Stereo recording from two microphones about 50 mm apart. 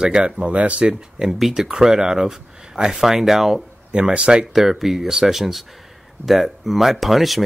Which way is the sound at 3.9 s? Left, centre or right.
Centre.